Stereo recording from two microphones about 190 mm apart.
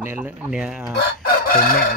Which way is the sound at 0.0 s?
10° right (ahead or behind).